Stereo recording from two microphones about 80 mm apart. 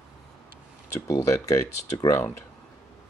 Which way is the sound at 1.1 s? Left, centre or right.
Left.